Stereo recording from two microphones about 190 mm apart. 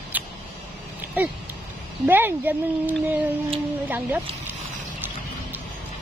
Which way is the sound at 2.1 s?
10° right (ahead or behind).